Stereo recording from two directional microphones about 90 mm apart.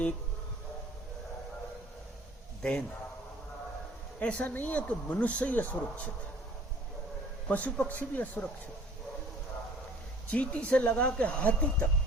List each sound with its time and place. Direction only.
2.6 s a man's voice: 10° left (ahead or behind)
4.2 s speech: 15° left (ahead or behind)
7.4 s speech: 15° left (ahead or behind)
10.2 s speech: 15° left (ahead or behind)